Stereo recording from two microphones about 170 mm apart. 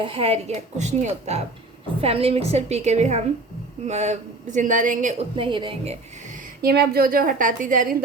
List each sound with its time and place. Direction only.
0.0 s a woman's voice: 35° right (ahead or behind)
5.4 s a woman's voice: 30° right (ahead or behind)
6.6 s a woman's voice: 60° right (ahead or behind)